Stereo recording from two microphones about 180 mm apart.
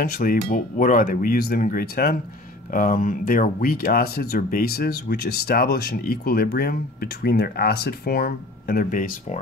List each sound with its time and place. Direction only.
0.0 s speech: 55° left (ahead or behind)